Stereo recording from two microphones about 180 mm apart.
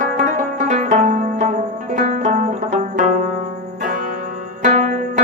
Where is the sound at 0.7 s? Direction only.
45° right (ahead or behind).